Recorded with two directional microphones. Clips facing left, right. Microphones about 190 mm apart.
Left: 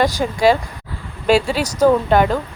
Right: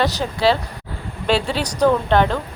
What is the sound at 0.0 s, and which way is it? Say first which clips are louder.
Speech: left 3 dB; 10° left (ahead or behind).